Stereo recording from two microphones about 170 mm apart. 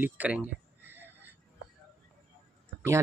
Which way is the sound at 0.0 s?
10° right (ahead or behind).